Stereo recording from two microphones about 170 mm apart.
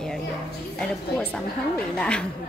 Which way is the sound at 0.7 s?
5° left (ahead or behind).